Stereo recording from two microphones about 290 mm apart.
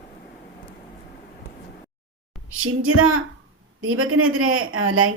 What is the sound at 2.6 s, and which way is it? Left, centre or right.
A woman's voice, right.